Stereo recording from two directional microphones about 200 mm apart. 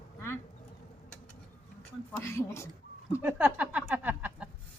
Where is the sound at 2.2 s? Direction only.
15° left (ahead or behind).